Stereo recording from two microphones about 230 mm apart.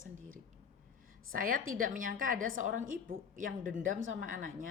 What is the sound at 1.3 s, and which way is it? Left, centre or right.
A woman's voice, right.